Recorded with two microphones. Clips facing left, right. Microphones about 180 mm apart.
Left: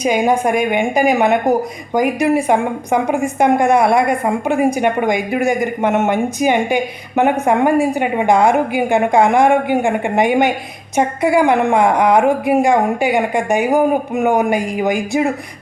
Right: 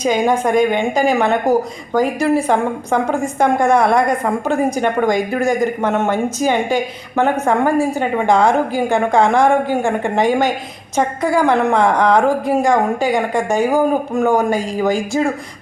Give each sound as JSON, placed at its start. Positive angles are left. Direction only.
{"t": 0.0, "sound": "a woman's voice", "side_deg": 10}